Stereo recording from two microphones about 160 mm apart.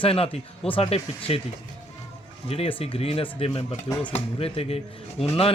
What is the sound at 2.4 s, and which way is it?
Speech, 35° left (ahead or behind).